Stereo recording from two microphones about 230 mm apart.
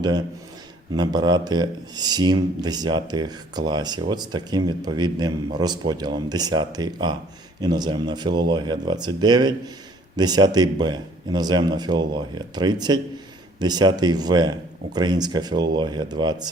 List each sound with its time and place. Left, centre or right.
0.9 s speech: centre